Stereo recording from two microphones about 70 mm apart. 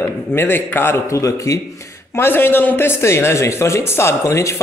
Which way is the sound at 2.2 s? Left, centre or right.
Left.